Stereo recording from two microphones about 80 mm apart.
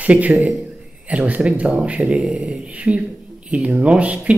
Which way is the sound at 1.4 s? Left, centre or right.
Centre.